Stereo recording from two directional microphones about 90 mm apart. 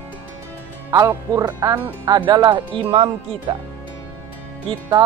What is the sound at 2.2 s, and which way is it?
Speech, 60° right (ahead or behind).